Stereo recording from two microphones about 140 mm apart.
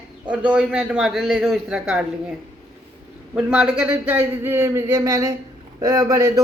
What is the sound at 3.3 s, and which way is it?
A man's voice, 10° right (ahead or behind).